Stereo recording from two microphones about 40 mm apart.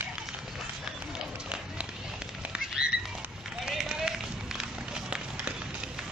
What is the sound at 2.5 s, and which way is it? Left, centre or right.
Bird flight, right.